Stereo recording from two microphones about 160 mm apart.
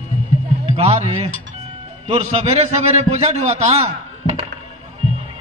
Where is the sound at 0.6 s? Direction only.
40° right (ahead or behind).